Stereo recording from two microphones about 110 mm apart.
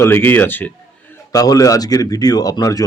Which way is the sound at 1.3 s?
30° left (ahead or behind).